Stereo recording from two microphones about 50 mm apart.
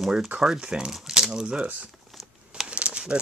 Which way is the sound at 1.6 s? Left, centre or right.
Right.